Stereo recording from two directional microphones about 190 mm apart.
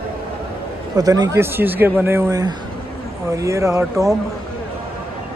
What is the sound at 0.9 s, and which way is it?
Speech, 20° right (ahead or behind).